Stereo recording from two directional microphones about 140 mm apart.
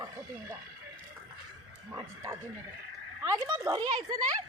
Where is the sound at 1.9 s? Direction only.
20° right (ahead or behind).